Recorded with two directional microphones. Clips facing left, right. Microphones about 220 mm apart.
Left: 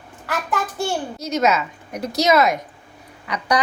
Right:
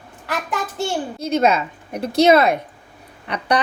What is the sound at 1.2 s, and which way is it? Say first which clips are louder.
A woman's voice: right 3 dB; 30° right (ahead or behind).